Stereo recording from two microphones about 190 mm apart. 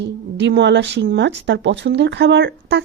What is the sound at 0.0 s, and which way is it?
Speech, 65° right (ahead or behind).